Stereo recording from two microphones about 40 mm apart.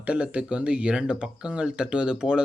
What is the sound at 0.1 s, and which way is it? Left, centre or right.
Speech, right.